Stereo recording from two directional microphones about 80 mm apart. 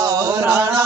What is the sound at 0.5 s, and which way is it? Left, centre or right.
Chant, right.